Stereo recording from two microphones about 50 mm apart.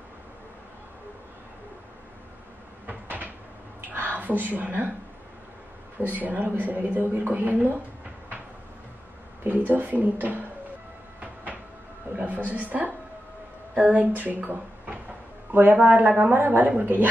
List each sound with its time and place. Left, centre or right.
2.9 s cupboard open or close: right
3.9 s speech: right
5.9 s a woman's voice: right
9.4 s a woman's voice: right
12.3 s a woman's voice: right